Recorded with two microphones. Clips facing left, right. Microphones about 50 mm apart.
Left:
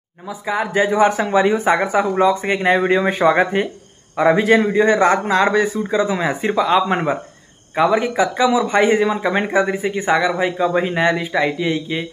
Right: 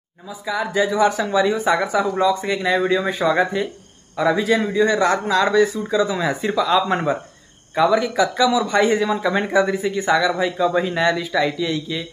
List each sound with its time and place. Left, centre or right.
0.3 s a man's voice: left